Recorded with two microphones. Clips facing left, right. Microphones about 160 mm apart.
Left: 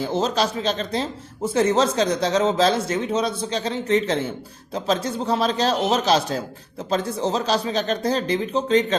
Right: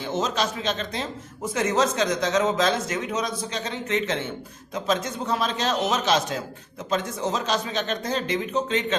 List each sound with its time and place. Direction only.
0.0 s speech: 30° left (ahead or behind)